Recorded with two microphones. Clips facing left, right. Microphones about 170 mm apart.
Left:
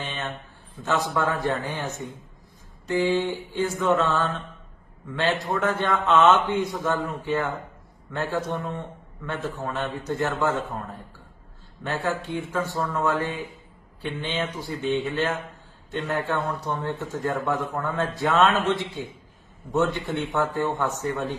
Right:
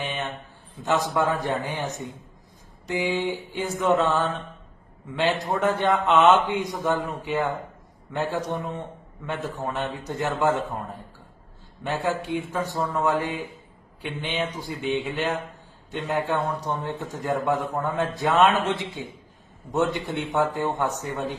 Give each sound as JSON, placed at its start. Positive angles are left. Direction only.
{"t": 0.0, "sound": "a sound", "side_deg": -15}
{"t": 0.8, "sound": "a man's voice", "side_deg": -15}
{"t": 11.8, "sound": "a man's voice", "side_deg": -15}